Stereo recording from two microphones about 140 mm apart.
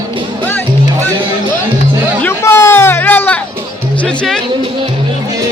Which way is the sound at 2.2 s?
20° left (ahead or behind).